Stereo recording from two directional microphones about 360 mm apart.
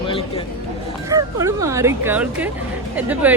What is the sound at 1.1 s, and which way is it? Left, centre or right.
A woman's voice, centre.